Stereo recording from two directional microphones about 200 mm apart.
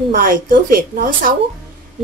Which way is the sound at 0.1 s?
45° right (ahead or behind).